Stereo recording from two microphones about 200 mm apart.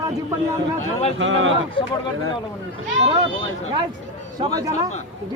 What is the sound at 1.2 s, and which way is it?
Speech, 75° right (ahead or behind).